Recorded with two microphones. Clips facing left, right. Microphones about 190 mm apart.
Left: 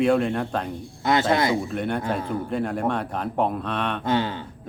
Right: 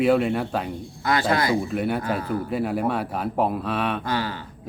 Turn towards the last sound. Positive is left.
turn(degrees=25)  # may be behind; listen again after turning